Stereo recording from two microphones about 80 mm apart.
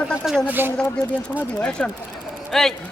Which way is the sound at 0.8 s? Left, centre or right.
Centre.